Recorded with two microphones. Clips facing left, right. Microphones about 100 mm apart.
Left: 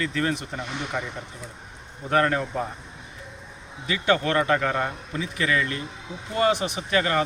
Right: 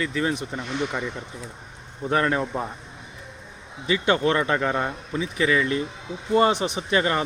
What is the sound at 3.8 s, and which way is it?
A man's voice, 25° right (ahead or behind).